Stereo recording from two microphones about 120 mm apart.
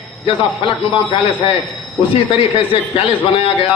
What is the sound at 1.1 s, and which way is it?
A man's voice, 50° left (ahead or behind).